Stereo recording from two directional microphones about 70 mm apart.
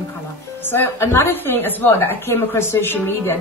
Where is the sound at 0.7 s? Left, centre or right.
Left.